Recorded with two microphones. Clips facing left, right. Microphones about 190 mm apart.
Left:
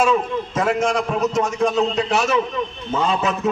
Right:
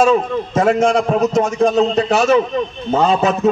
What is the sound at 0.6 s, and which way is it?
A man's voice, 45° right (ahead or behind).